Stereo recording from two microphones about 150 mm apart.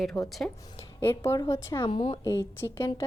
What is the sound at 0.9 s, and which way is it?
Speech, 15° left (ahead or behind).